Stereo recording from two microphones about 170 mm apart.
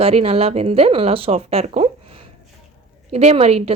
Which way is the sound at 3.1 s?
35° right (ahead or behind).